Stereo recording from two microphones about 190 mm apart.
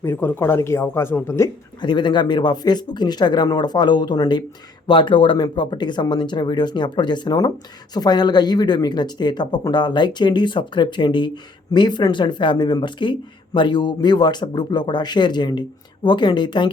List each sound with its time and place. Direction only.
0.0 s speech: 10° left (ahead or behind)
1.8 s speech: 25° left (ahead or behind)